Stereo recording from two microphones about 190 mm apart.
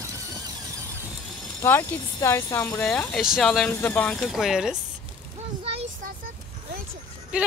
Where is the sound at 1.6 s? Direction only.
15° left (ahead or behind).